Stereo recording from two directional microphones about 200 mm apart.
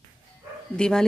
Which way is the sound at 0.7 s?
5° left (ahead or behind).